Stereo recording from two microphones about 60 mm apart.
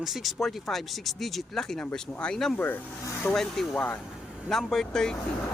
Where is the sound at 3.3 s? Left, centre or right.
Centre.